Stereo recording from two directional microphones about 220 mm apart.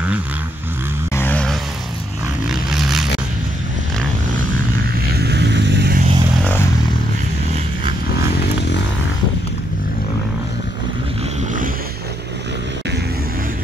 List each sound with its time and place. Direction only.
1.1 s vehicle: 10° left (ahead or behind)
2.7 s a sound: centre (ahead or behind)
5.2 s vehicle: 50° right (ahead or behind)